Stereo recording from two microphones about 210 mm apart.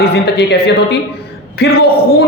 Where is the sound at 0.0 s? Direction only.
50° left (ahead or behind).